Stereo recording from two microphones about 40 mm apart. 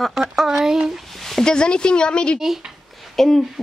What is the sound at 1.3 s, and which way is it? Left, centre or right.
Speech, centre.